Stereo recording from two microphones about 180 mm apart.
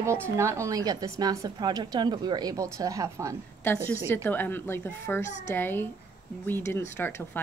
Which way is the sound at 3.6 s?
15° left (ahead or behind).